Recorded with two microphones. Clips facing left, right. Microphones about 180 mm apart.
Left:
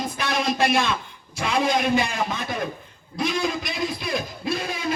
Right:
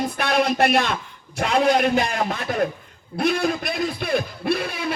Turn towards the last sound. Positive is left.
turn(degrees=-60)  # may be behind; listen again after turning